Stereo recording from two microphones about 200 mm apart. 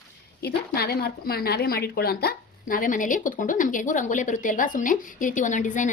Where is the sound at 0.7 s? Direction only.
50° left (ahead or behind).